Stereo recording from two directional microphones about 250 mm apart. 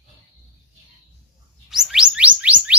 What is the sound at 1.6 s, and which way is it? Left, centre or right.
Chirp tone, centre.